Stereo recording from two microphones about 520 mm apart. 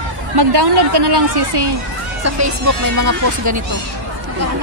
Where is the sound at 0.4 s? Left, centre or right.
Right.